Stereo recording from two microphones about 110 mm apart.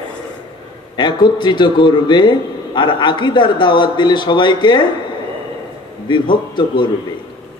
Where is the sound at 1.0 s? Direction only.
45° left (ahead or behind).